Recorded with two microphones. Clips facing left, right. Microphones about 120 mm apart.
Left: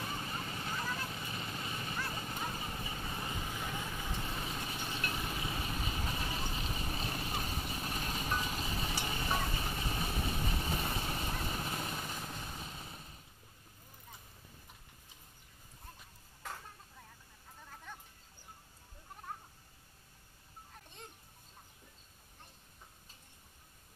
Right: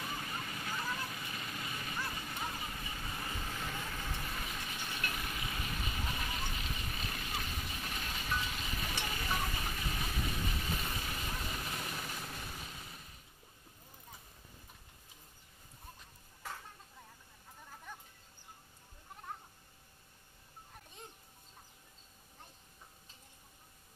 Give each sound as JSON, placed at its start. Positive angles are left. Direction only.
{"t": 0.0, "sound": "vehicle", "side_deg": 30}
{"t": 2.0, "sound": "a sound", "side_deg": 30}
{"t": 2.6, "sound": "vehicle", "side_deg": 30}